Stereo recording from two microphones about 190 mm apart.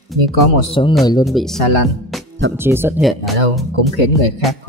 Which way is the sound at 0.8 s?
25° left (ahead or behind).